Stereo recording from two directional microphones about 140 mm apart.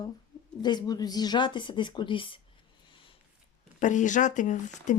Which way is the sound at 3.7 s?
60° left (ahead or behind).